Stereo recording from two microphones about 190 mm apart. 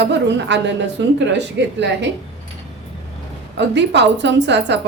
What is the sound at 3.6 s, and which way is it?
A woman's voice, 65° right (ahead or behind).